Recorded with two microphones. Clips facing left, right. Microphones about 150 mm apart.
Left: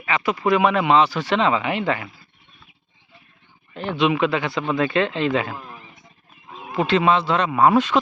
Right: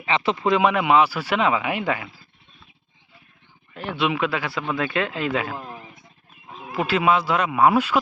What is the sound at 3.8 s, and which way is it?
Speech, 5° right (ahead or behind).